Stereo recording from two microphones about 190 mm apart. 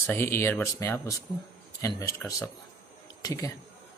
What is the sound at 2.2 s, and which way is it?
A man's voice, 15° left (ahead or behind).